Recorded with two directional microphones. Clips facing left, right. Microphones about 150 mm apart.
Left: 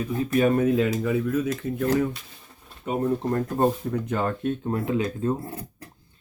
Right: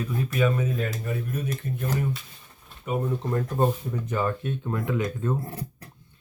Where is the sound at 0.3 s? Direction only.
50° left (ahead or behind); by 1.5 s 90° left.